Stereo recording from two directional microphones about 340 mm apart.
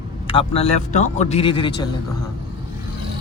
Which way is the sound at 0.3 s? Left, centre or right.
Centre.